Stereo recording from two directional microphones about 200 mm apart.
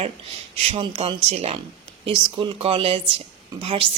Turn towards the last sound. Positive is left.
turn(degrees=-25)  # may be behind; listen again after turning